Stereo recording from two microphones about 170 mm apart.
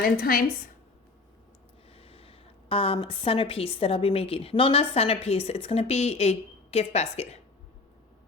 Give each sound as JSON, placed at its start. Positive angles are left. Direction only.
{"t": 0.0, "sound": "a woman's voice", "side_deg": 60}
{"t": 2.0, "sound": "a woman's voice", "side_deg": 35}